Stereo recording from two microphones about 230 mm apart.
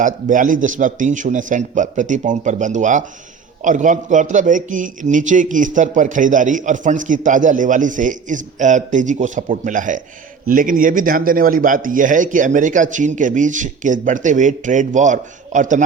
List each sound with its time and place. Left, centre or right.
0.0 s a man's voice: right